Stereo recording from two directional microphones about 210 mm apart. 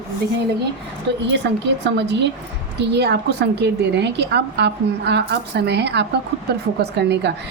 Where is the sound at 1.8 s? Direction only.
55° right (ahead or behind).